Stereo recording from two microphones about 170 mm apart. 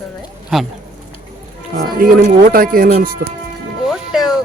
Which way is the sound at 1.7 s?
55° right (ahead or behind).